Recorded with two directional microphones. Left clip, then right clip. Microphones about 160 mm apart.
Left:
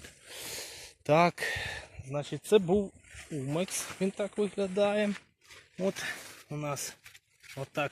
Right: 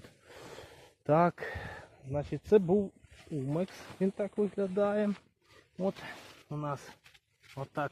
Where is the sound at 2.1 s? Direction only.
20° right (ahead or behind).